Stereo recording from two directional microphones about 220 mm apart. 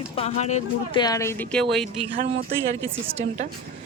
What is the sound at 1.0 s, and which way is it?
Speech, 15° left (ahead or behind).